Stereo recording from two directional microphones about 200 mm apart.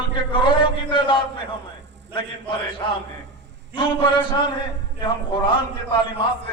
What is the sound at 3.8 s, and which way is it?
A man's voice, 25° left (ahead or behind).